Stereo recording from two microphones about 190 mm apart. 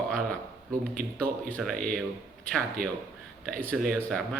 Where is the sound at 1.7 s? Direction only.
45° right (ahead or behind).